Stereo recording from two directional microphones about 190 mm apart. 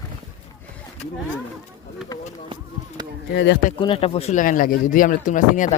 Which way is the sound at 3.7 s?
25° left (ahead or behind).